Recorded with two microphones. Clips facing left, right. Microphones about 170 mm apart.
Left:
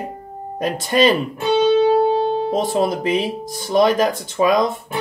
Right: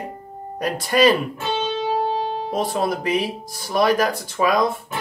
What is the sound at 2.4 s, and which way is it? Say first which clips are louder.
Speech: left 4 dB; 20° left (ahead or behind).